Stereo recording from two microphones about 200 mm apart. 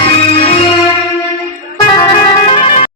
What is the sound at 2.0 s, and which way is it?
Music, 20° left (ahead or behind).